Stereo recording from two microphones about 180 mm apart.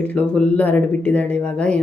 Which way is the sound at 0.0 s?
10° left (ahead or behind).